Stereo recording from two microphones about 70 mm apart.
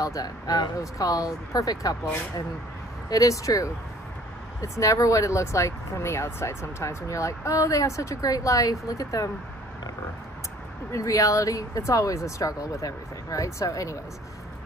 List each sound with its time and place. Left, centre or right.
0.0 s speech: left
3.1 s speech: left
10.9 s speech: left